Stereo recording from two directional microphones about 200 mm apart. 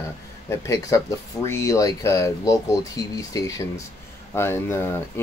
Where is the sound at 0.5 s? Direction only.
15° left (ahead or behind).